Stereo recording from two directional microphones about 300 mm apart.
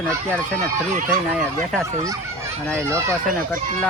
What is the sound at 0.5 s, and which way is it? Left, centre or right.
Speech, right.